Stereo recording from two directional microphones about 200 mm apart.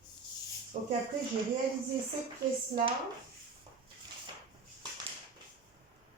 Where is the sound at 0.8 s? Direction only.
35° right (ahead or behind).